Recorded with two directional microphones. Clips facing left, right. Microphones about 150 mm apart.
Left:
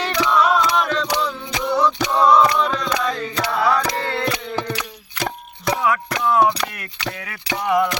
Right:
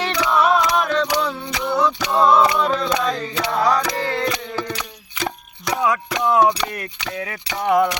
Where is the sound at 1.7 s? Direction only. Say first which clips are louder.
Even; centre (ahead or behind).